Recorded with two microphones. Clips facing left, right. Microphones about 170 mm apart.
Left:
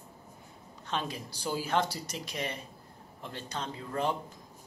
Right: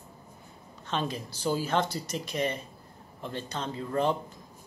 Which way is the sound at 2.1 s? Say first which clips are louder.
Right 6 dB; 50° right (ahead or behind).